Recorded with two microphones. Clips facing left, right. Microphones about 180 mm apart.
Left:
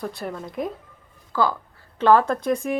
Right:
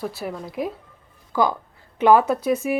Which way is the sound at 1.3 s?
15° right (ahead or behind).